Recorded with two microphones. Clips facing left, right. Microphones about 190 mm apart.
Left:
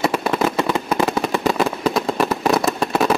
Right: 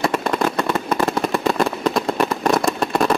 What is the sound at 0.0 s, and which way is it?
Fireworks, centre (ahead or behind).